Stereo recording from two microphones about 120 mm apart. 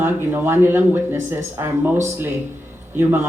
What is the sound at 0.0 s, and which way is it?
Speech, 20° right (ahead or behind).